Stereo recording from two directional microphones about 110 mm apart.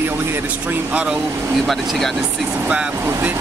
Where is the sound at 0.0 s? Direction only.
20° right (ahead or behind).